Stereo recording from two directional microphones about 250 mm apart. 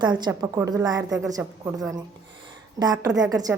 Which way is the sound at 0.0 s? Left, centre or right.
Centre.